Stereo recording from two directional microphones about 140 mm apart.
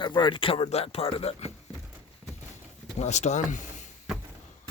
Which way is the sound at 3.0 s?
55° left (ahead or behind).